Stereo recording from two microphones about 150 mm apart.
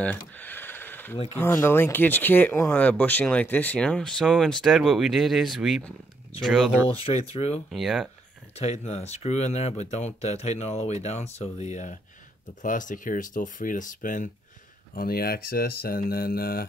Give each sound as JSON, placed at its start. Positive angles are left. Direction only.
{"t": 0.0, "sound": "a sound", "side_deg": 10}
{"t": 1.3, "sound": "speech", "side_deg": 15}
{"t": 7.1, "sound": "speech", "side_deg": 40}
{"t": 7.7, "sound": "speech", "side_deg": 0}
{"t": 8.5, "sound": "speech", "side_deg": 45}
{"t": 15.0, "sound": "speech", "side_deg": 90}